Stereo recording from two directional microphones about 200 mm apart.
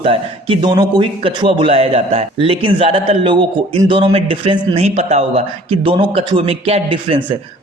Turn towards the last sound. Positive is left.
turn(degrees=-25)  # may be behind; listen again after turning